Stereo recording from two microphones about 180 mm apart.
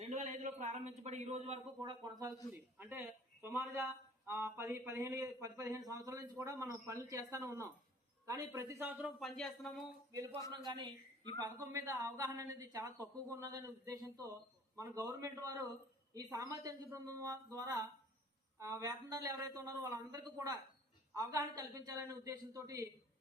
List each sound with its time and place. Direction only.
0.0 s a man's voice: 40° right (ahead or behind)
1.8 s a man's voice: 20° right (ahead or behind)
2.6 s a man's voice: 10° right (ahead or behind)
10.6 s a man's voice: 25° right (ahead or behind)